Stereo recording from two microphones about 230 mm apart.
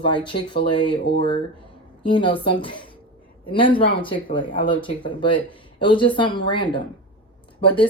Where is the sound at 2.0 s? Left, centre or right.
Left.